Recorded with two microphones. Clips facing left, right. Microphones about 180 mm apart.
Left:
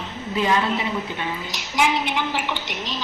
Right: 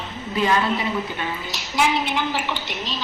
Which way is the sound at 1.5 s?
15° left (ahead or behind).